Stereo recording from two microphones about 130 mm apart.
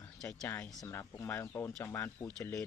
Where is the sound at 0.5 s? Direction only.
10° left (ahead or behind).